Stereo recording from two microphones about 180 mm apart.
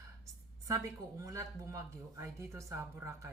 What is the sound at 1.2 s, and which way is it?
Speech, 20° right (ahead or behind).